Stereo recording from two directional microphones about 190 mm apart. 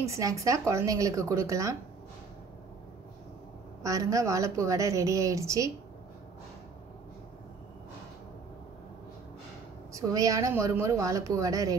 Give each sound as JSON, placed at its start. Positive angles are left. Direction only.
{"t": 0.0, "sound": "a woman's voice", "side_deg": -15}
{"t": 3.8, "sound": "a woman's voice", "side_deg": -15}
{"t": 9.9, "sound": "a woman's voice", "side_deg": -15}